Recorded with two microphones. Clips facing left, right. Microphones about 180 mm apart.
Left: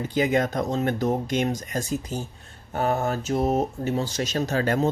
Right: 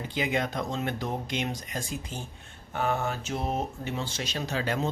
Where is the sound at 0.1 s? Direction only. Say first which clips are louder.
Left 7 dB; 45° left (ahead or behind).